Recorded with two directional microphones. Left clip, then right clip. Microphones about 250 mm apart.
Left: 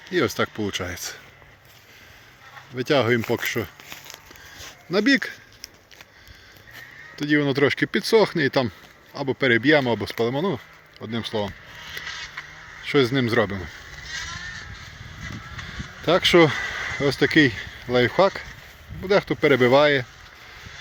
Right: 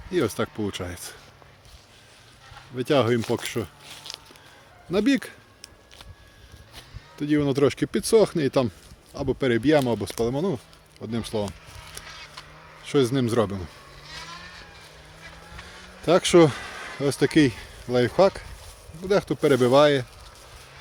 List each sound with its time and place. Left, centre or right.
0.1 s speech: centre
2.7 s speech: centre
4.9 s speech: centre
6.7 s speech: centre
12.0 s a sound: right
12.4 s a sound: centre
14.0 s horse: right
16.0 s speech: centre